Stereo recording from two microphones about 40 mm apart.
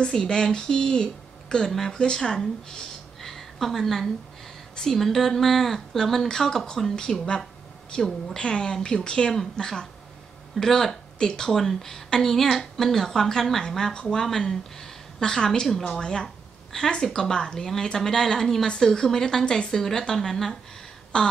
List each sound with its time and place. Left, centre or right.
0.0 s a woman's voice: centre
3.2 s a sound: centre
4.9 s a woman's voice: centre
21.1 s speech: left